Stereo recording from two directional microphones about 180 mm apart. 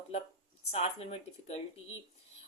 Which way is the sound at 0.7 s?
35° left (ahead or behind).